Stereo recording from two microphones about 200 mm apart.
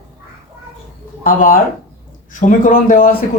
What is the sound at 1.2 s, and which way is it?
Speech, 45° left (ahead or behind).